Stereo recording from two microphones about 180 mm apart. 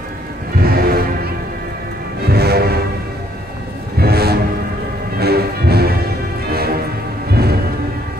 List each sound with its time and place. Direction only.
0.6 s music: 55° right (ahead or behind)
4.0 s music: 60° right (ahead or behind)